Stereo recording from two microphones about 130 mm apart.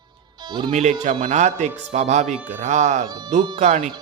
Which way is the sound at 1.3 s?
70° right (ahead or behind).